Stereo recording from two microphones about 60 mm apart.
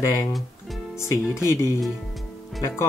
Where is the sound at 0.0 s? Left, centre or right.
Left.